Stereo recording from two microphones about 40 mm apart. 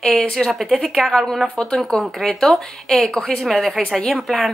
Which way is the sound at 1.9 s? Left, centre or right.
Centre.